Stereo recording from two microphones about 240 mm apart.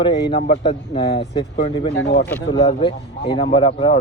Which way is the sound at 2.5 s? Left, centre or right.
Left.